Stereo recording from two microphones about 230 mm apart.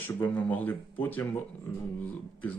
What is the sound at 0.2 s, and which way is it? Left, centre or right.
Speech, centre.